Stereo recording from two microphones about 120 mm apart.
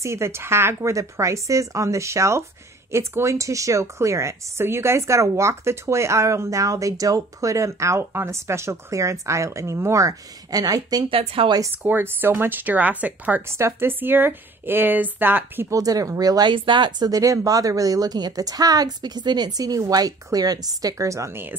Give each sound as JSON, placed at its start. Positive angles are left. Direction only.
{"t": 0.0, "sound": "speech", "side_deg": -25}
{"t": 11.1, "sound": "speech", "side_deg": -50}
{"t": 11.7, "sound": "speech", "side_deg": -15}